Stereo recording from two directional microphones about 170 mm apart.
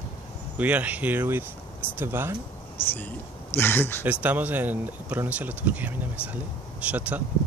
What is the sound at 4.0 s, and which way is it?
Speech, 10° right (ahead or behind).